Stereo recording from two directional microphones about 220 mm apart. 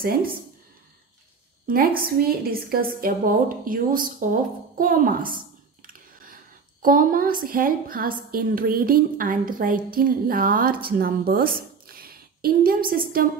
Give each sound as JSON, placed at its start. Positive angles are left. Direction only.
{"t": 1.7, "sound": "a woman's voice", "side_deg": -40}
{"t": 5.9, "sound": "a sound", "side_deg": -40}
{"t": 6.8, "sound": "a woman's voice", "side_deg": -40}